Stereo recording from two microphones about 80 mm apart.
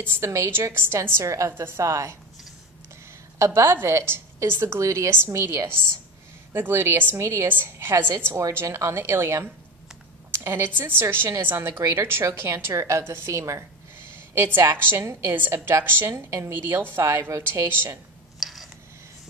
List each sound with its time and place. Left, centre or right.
0.0 s a woman's voice: right
3.3 s a woman's voice: right
14.1 s a woman's voice: right
16.5 s a woman's voice: right
18.4 s a sound: centre